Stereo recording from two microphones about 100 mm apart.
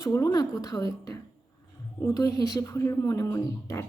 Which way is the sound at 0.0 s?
35° left (ahead or behind).